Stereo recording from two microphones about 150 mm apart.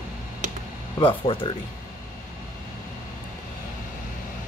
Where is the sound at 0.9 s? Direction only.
35° left (ahead or behind).